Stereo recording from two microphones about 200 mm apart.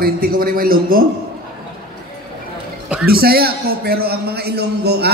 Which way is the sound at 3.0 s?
50° right (ahead or behind).